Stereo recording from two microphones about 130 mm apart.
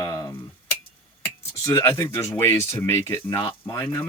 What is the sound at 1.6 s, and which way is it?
Speech, 20° left (ahead or behind).